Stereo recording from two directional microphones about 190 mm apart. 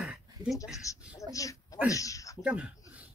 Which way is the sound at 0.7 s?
15° left (ahead or behind).